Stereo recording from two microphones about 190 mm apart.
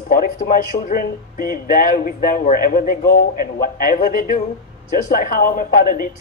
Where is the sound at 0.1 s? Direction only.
50° left (ahead or behind).